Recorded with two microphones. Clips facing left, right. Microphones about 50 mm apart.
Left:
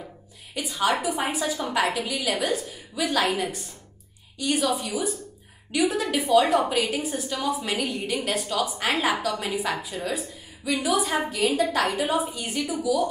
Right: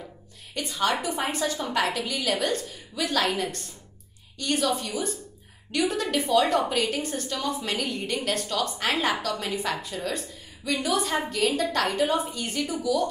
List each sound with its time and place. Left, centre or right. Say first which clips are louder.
0.6 s a woman's voice: left 2 dB; centre